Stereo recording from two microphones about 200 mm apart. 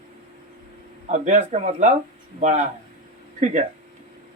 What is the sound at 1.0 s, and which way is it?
Speech, 35° right (ahead or behind).